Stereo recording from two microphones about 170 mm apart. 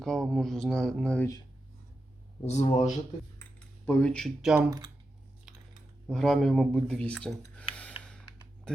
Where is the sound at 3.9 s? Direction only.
10° left (ahead or behind).